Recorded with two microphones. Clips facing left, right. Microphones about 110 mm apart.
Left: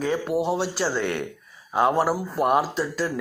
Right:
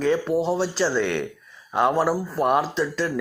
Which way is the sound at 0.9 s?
45° left (ahead or behind).